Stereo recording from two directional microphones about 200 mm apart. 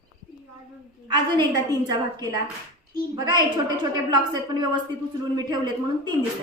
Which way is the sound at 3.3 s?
20° right (ahead or behind).